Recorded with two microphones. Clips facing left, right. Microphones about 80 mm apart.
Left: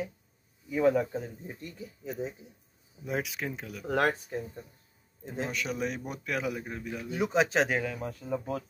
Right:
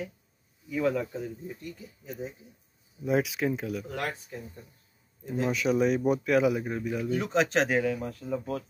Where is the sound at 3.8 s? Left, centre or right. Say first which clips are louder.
Left 7 dB; left.